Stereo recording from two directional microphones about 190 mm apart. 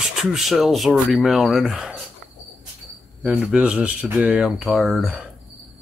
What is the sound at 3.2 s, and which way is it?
Speech, 5° right (ahead or behind).